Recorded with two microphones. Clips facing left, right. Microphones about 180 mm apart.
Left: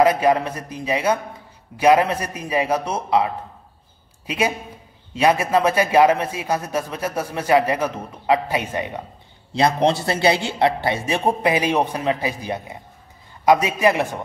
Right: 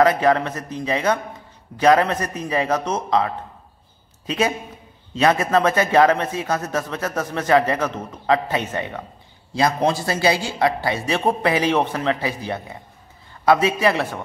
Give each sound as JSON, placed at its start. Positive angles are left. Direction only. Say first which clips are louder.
{"t": 0.0, "sound": "a man's voice", "louder": "even", "side_deg": 10}
{"t": 9.5, "sound": "a man's voice", "louder": "left 2 dB", "side_deg": 25}